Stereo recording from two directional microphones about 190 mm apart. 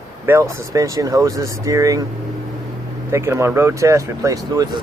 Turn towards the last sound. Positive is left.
turn(degrees=-20)  # may be behind; listen again after turning